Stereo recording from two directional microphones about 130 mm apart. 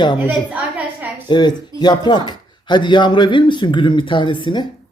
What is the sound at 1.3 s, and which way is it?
Speech, 35° left (ahead or behind).